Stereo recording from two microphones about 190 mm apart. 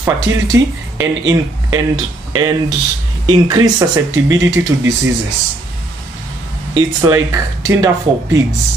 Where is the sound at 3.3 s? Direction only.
20° right (ahead or behind).